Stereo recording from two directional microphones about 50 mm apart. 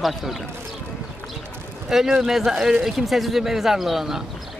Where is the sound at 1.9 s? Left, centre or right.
Centre.